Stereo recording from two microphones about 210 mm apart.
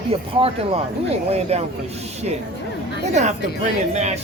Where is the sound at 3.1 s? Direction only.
35° right (ahead or behind).